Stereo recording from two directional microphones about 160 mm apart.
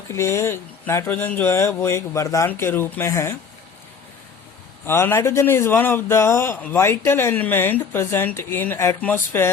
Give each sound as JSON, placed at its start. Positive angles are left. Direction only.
{"t": 0.1, "sound": "speech", "side_deg": 15}
{"t": 4.9, "sound": "speech", "side_deg": 15}